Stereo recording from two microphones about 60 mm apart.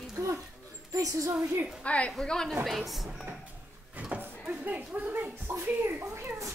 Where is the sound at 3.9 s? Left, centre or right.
Right.